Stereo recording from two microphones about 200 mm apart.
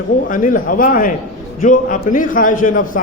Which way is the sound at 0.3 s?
45° left (ahead or behind).